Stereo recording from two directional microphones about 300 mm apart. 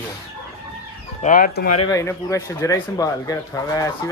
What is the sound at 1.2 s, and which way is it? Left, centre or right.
Speech, left.